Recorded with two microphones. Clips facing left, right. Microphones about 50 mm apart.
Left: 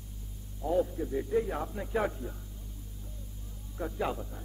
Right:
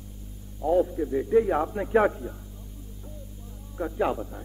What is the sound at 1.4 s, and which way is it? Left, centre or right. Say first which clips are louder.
Speech: right 9 dB; right.